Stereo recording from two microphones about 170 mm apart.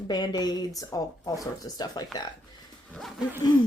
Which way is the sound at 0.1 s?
25° left (ahead or behind).